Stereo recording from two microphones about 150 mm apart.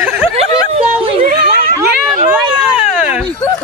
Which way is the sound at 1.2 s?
70° right (ahead or behind).